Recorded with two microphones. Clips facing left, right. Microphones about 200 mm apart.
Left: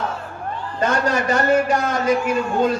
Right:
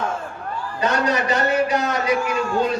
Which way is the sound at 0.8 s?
50° left (ahead or behind).